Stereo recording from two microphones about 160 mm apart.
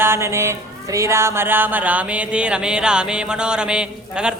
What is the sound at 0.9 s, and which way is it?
Music, 20° right (ahead or behind).